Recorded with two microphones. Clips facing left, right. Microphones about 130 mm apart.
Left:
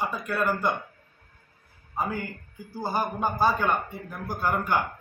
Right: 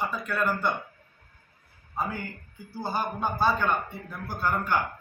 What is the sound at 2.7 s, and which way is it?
A man's voice, 15° left (ahead or behind).